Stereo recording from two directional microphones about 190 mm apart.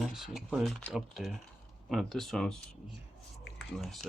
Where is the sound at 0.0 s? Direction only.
Centre (ahead or behind).